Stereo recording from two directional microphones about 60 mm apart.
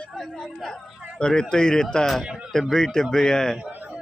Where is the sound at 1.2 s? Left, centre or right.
Centre.